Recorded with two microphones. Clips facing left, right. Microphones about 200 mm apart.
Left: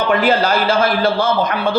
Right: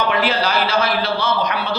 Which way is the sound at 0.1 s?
50° left (ahead or behind).